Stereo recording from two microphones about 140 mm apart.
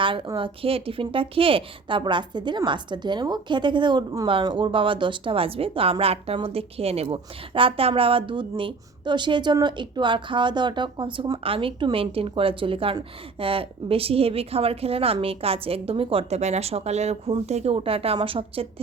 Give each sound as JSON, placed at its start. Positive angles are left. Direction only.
{"t": 0.0, "sound": "a woman's voice", "side_deg": -35}